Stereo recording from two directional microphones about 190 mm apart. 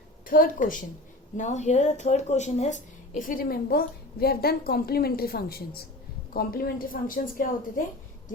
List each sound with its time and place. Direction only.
0.3 s speech: 45° left (ahead or behind)